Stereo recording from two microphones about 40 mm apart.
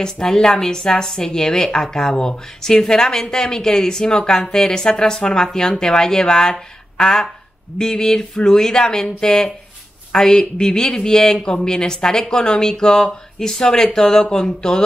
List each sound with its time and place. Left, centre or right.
0.0 s a woman's voice: centre
7.0 s a sound: centre
7.8 s a woman's voice: centre